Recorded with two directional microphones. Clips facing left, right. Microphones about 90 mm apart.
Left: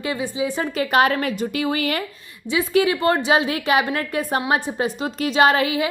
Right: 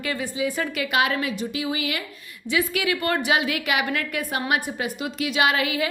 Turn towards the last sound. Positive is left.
turn(degrees=35)  # may be behind; listen again after turning